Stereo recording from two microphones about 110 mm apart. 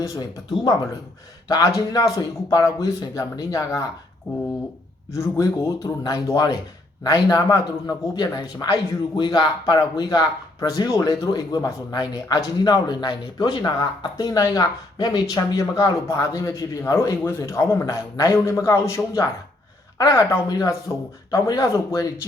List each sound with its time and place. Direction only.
0.0 s speech: 25° left (ahead or behind)
1.5 s speech: 35° left (ahead or behind)
5.1 s speech: 25° left (ahead or behind)